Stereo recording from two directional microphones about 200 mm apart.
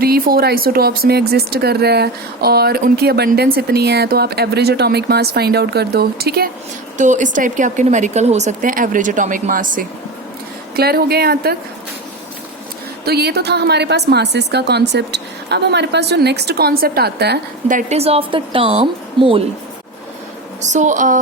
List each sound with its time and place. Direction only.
0.0 s speech: 50° right (ahead or behind)
6.9 s a woman's voice: 40° right (ahead or behind)
13.1 s a woman's voice: 55° right (ahead or behind); by 19.4 s 30° right (ahead or behind)
20.6 s a woman's voice: 35° right (ahead or behind)